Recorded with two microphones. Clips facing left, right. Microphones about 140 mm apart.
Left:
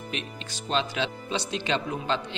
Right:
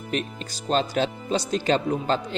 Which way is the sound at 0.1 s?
40° right (ahead or behind).